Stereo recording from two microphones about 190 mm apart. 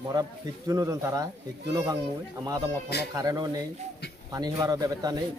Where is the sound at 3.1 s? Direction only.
20° right (ahead or behind).